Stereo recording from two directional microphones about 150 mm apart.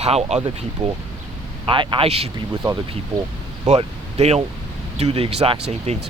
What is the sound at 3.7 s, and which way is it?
Speech, 45° right (ahead or behind).